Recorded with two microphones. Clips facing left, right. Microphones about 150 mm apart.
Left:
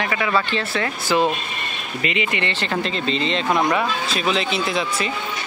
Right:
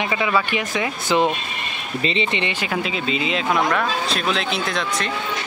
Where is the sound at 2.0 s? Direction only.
30° right (ahead or behind).